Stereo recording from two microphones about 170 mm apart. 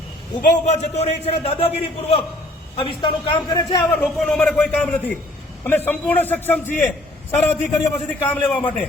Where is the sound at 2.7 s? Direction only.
30° left (ahead or behind).